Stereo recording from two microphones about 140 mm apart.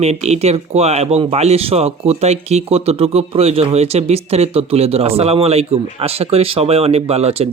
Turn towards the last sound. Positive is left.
turn(degrees=-45)  # may be behind; listen again after turning